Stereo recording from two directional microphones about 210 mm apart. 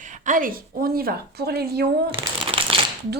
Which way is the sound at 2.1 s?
25° right (ahead or behind).